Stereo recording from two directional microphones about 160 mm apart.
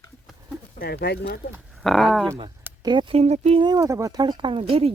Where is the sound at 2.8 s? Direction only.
30° right (ahead or behind).